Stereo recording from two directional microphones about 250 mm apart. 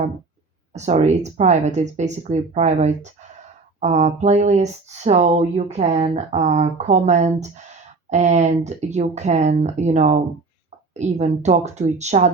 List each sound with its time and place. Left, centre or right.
0.7 s speech: right